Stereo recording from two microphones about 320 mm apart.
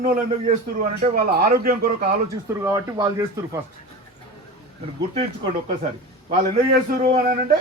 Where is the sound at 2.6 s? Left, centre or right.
Centre.